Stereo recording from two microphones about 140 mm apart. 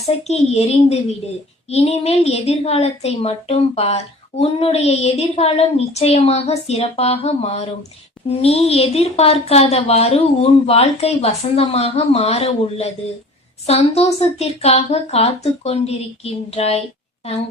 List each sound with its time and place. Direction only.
0.3 s a woman's voice: 50° left (ahead or behind)